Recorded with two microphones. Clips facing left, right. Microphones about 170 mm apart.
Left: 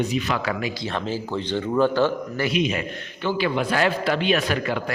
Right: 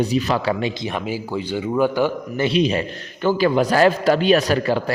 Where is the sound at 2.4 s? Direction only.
30° right (ahead or behind).